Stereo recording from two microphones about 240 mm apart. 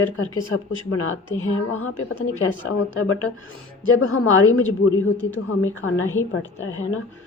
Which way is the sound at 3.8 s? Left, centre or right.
Left.